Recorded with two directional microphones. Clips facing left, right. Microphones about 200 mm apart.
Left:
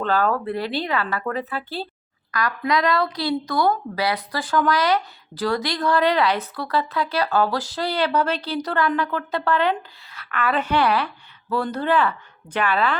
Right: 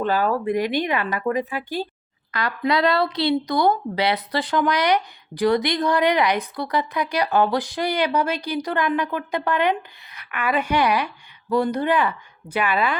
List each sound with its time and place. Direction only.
0.0 s a woman's voice: 10° right (ahead or behind)
2.3 s a woman's voice: 25° right (ahead or behind)